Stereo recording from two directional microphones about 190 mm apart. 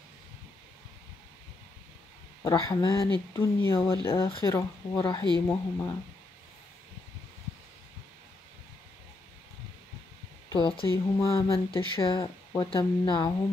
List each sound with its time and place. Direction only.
2.4 s speech: 20° left (ahead or behind)
3.3 s speech: 10° left (ahead or behind)
3.7 s speech: 30° left (ahead or behind)
10.5 s speech: 25° left (ahead or behind)